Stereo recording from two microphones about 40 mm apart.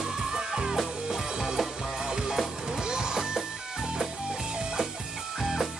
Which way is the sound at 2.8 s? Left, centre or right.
Centre.